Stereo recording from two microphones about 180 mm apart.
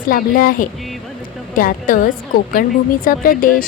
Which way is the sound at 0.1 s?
50° left (ahead or behind).